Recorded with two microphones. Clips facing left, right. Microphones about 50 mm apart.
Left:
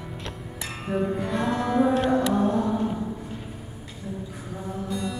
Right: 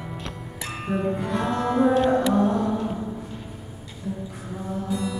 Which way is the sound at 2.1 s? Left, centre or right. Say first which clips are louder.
Right 2 dB; centre.